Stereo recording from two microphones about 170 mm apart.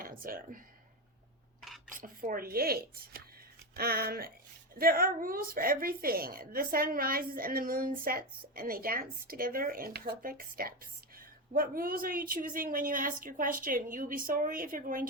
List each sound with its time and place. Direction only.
0.0 s speech: 55° right (ahead or behind)
2.0 s a woman's voice: 55° right (ahead or behind)